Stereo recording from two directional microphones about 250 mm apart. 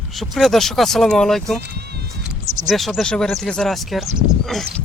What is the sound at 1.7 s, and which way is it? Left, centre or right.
Music, right.